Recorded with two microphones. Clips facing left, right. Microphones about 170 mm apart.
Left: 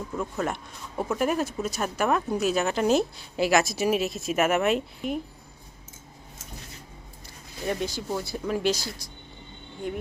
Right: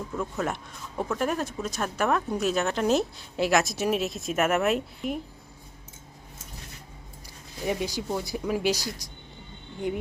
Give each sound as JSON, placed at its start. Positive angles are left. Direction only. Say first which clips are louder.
{"t": 0.2, "sound": "speech", "louder": "left 1 dB", "side_deg": 0}
{"t": 7.6, "sound": "speech", "louder": "even", "side_deg": -15}